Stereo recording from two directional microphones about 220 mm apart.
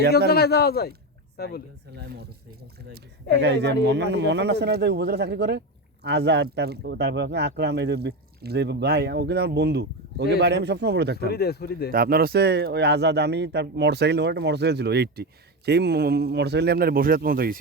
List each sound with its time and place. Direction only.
0.3 s a man's voice: 45° left (ahead or behind)
1.9 s a man's voice: 50° right (ahead or behind)
11.3 s a man's voice: 45° left (ahead or behind)
11.9 s a man's voice: 40° right (ahead or behind)